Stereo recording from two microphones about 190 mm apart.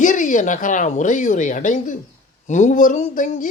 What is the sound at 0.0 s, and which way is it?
A woman's voice, 40° left (ahead or behind).